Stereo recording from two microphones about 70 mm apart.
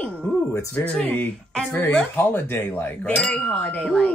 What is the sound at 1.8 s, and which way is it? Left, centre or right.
Speech, left.